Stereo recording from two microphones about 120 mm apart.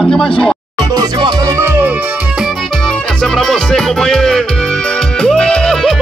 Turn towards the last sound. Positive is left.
turn(degrees=5)  # may be behind; listen again after turning